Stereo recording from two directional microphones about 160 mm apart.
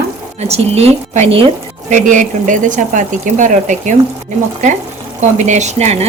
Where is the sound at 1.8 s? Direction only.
50° right (ahead or behind).